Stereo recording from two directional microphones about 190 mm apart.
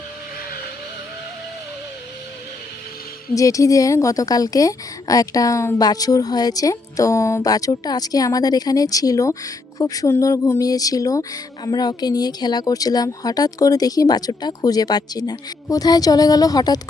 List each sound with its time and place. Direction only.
3.3 s speech: 15° left (ahead or behind)